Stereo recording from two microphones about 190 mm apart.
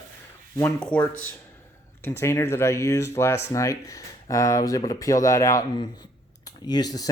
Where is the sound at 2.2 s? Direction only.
15° left (ahead or behind).